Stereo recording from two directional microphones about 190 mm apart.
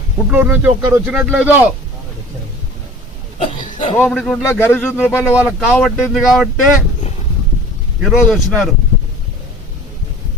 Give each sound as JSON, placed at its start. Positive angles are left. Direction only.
{"t": 0.3, "sound": "speech", "side_deg": -10}
{"t": 3.3, "sound": "hiccup", "side_deg": 40}
{"t": 4.0, "sound": "speech", "side_deg": 0}
{"t": 5.1, "sound": "speech", "side_deg": -5}
{"t": 8.0, "sound": "speech", "side_deg": 0}